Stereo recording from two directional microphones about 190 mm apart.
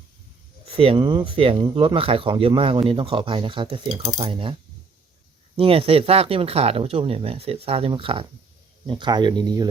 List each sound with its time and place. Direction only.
0.8 s speech: 25° right (ahead or behind)
5.5 s speech: 30° right (ahead or behind)